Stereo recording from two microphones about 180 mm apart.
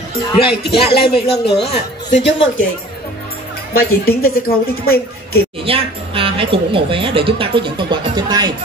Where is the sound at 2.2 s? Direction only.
90° left.